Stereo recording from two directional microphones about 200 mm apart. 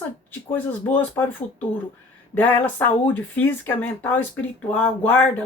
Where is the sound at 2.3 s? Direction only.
10° left (ahead or behind).